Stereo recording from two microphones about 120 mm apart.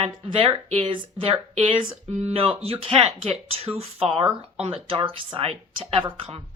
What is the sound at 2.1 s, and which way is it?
Speech, 60° right (ahead or behind).